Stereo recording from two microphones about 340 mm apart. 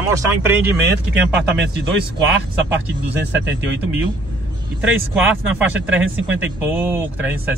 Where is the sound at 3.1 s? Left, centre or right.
Right.